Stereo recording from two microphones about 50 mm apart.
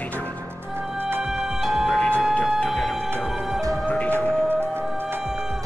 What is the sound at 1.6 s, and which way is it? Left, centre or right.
Music, centre.